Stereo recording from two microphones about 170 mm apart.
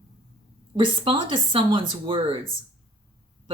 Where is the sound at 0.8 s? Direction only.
30° right (ahead or behind).